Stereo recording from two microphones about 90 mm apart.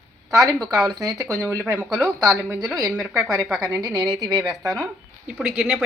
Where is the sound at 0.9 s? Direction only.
40° right (ahead or behind).